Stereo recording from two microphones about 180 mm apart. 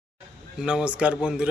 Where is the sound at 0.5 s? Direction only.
5° right (ahead or behind).